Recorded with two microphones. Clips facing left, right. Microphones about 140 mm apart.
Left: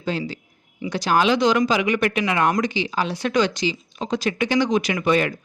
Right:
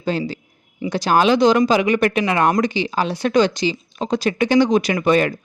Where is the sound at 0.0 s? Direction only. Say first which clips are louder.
Right 4 dB; 40° right (ahead or behind).